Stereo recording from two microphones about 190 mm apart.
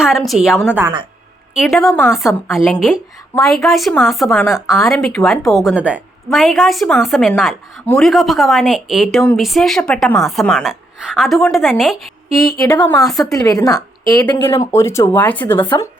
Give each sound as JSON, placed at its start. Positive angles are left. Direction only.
{"t": 0.0, "sound": "a woman's voice", "side_deg": 0}
{"t": 1.9, "sound": "speech", "side_deg": 15}
{"t": 2.1, "sound": "a woman's voice", "side_deg": 0}
{"t": 12.3, "sound": "speech", "side_deg": 15}